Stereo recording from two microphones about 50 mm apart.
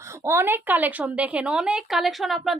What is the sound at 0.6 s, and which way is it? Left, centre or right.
A woman's voice, right.